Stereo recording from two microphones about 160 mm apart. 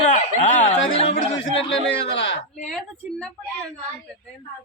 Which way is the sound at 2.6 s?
5° left (ahead or behind).